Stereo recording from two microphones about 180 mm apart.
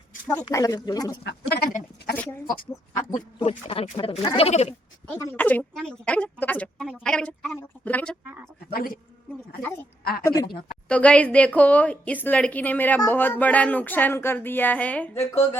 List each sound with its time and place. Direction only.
0.5 s speech: 20° left (ahead or behind)
1.2 s speech: 65° left (ahead or behind)
2.1 s speech: 10° left (ahead or behind)
3.7 s speech: 30° left (ahead or behind)
5.1 s a woman's voice: 10° left (ahead or behind)
10.0 s a woman's voice: 55° left (ahead or behind)
10.2 s speech: 20° left (ahead or behind)
10.8 s speech: 5° left (ahead or behind)